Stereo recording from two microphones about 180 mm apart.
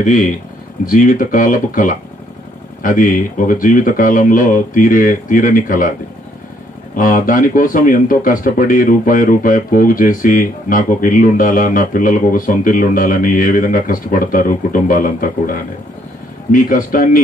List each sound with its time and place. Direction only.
0.0 s speech: 45° left (ahead or behind)
7.0 s speech: 50° left (ahead or behind)
16.5 s speech: 50° left (ahead or behind)